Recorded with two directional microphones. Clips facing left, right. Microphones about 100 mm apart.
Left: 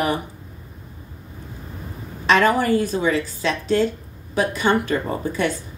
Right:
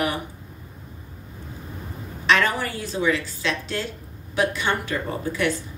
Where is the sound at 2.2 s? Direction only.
45° left (ahead or behind).